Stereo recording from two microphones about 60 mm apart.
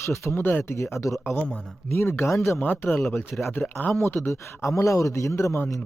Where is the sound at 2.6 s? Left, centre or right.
Left.